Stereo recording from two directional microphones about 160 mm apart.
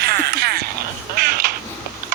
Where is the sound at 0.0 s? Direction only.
80° right.